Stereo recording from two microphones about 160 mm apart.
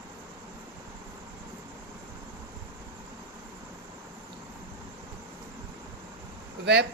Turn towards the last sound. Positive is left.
turn(degrees=-90)